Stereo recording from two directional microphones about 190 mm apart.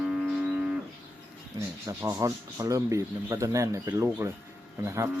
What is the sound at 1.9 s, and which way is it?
Speech, 15° right (ahead or behind).